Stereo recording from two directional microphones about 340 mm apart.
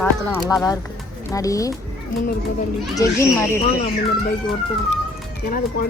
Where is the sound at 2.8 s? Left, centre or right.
Centre.